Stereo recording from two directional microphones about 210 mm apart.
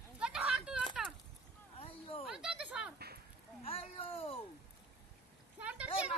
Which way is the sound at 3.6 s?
25° left (ahead or behind).